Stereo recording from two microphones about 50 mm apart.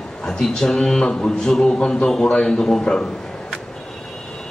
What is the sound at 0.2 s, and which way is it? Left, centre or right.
A man's voice, centre.